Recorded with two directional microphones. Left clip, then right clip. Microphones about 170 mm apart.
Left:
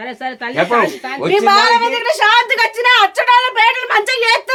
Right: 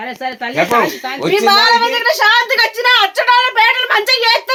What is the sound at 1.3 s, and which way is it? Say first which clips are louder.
A woman's voice: even; 25° left (ahead or behind).